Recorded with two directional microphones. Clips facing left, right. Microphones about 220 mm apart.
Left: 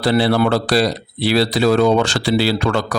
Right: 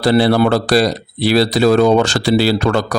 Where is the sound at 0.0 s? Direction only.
40° right (ahead or behind).